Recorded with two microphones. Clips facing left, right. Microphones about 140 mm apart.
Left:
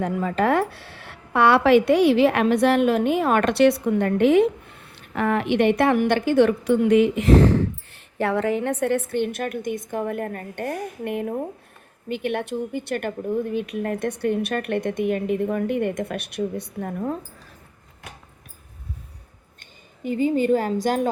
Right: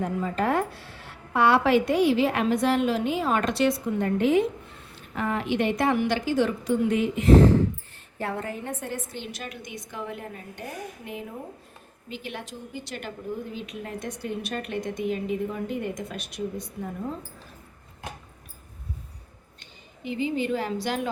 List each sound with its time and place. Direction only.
0.0 s a woman's voice: 75° left (ahead or behind)
20.1 s a woman's voice: 45° left (ahead or behind)